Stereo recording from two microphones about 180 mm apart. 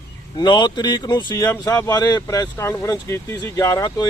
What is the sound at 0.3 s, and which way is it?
Speech, 25° left (ahead or behind).